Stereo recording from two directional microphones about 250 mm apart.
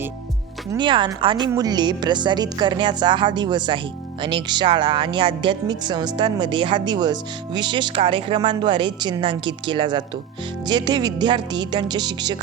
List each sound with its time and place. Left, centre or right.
0.7 s a woman's voice: centre